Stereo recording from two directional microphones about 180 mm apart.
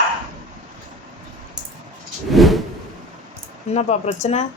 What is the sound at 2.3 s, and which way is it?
Vehicle, centre (ahead or behind).